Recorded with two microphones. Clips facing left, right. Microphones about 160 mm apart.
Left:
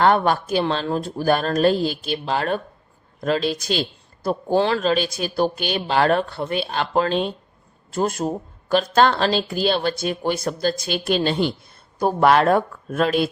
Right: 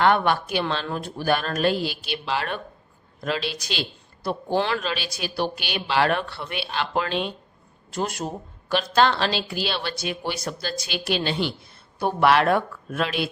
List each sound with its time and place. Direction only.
0.0 s a woman's voice: 35° left (ahead or behind)